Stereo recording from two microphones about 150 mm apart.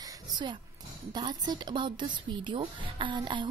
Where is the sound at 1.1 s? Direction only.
30° right (ahead or behind).